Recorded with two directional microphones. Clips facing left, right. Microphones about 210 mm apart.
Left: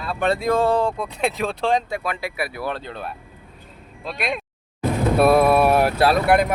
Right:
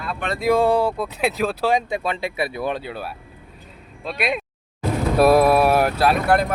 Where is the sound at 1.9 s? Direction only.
25° right (ahead or behind); by 5.9 s centre (ahead or behind).